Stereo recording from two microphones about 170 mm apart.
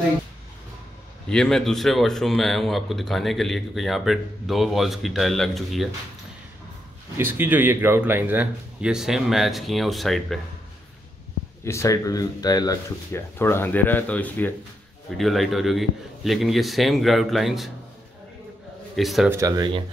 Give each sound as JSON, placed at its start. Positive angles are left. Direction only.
{"t": 1.3, "sound": "speech", "side_deg": 5}
{"t": 7.2, "sound": "speech", "side_deg": -10}
{"t": 11.6, "sound": "speech", "side_deg": 15}
{"t": 18.9, "sound": "speech", "side_deg": 0}
{"t": 19.3, "sound": "speech", "side_deg": -20}